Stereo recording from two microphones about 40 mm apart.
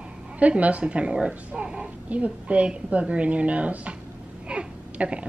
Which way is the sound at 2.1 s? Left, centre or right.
Right.